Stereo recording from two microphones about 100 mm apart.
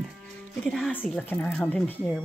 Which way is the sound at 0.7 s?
5° left (ahead or behind).